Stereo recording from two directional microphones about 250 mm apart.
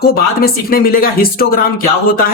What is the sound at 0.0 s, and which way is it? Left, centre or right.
Speech, left.